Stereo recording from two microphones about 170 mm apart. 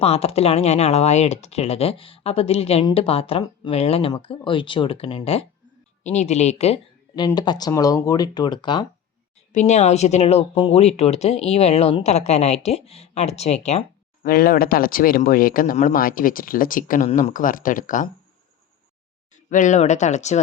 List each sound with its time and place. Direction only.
0.0 s speech: 35° left (ahead or behind)
7.2 s speech: 25° left (ahead or behind)
9.5 s speech: 45° left (ahead or behind)
14.3 s speech: 60° left (ahead or behind)
19.5 s speech: 45° left (ahead or behind)